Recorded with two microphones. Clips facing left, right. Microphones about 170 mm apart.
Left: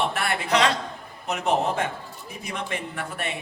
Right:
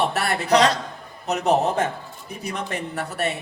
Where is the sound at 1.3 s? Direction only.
40° right (ahead or behind).